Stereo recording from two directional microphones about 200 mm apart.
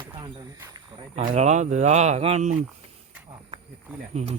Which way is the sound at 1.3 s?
35° right (ahead or behind).